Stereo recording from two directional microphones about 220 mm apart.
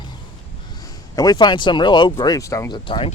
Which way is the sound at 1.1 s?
15° left (ahead or behind).